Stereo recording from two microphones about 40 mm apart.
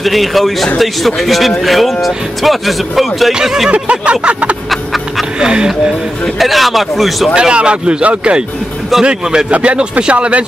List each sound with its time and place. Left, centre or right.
0.0 s speech: centre
3.7 s a sound: right
5.4 s speech: right
6.4 s speech: centre
7.3 s speech: right